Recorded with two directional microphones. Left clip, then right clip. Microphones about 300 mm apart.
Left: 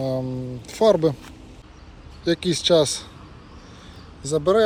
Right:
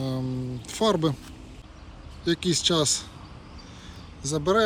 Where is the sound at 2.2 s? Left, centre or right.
Centre.